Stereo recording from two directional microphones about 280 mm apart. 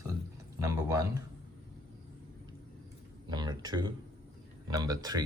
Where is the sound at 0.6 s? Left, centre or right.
Centre.